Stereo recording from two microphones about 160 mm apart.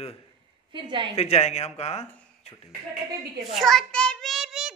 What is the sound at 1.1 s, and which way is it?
Speech, 40° left (ahead or behind).